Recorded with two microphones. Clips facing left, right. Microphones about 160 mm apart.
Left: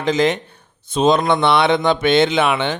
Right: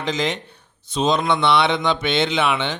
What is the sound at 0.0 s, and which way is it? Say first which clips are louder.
A man's voice: left 6 dB; 50° left (ahead or behind).